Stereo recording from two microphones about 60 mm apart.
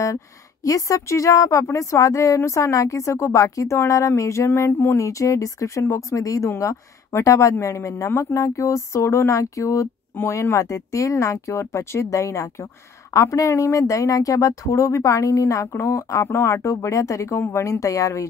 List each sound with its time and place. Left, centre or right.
0.7 s speech: left
4.5 s a sound: left
4.9 s speech: left
17.4 s speech: left
17.6 s a woman's voice: left